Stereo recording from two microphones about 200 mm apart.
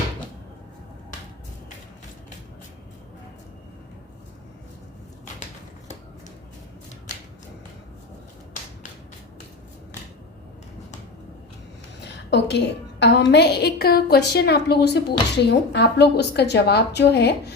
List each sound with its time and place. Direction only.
11.9 s a woman's voice: 60° left (ahead or behind)